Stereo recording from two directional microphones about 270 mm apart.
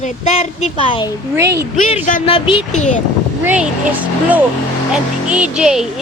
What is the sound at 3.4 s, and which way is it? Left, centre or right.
Speech, centre.